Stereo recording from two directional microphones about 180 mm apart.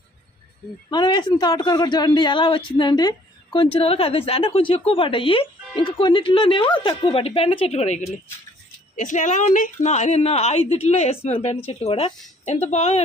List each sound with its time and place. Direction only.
0.9 s a woman's voice: 25° left (ahead or behind)